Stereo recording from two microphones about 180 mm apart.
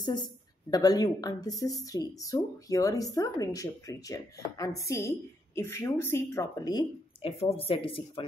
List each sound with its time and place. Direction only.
0.0 s a woman's voice: 25° left (ahead or behind)